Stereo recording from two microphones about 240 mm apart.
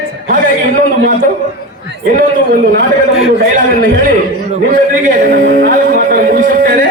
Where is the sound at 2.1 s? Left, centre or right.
Right.